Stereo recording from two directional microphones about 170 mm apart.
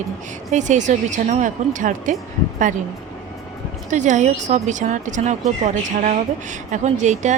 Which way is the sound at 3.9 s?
45° right (ahead or behind).